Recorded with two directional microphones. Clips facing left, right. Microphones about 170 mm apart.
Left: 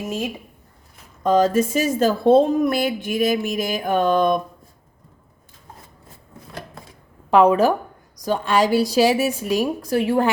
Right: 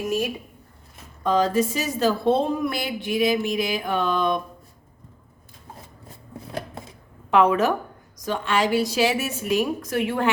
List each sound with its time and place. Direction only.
1.2 s a woman's voice: 50° left (ahead or behind)
7.3 s a woman's voice: 35° left (ahead or behind)